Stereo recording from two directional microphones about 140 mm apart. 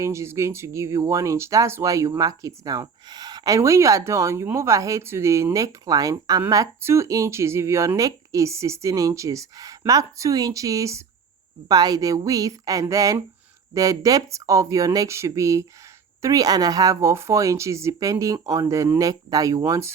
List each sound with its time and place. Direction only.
0.0 s speech: 20° right (ahead or behind)